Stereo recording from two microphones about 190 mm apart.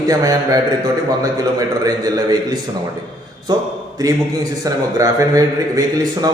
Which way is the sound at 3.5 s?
20° right (ahead or behind).